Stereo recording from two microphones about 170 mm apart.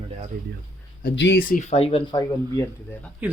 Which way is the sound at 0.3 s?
60° right (ahead or behind).